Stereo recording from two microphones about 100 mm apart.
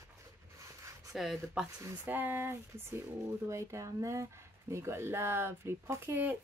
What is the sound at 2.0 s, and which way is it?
Speech, 20° right (ahead or behind).